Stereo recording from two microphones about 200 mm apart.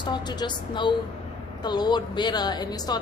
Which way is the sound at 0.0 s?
20° left (ahead or behind).